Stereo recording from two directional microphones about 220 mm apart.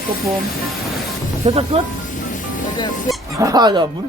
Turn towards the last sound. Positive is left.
turn(degrees=-20)  # may be behind; listen again after turning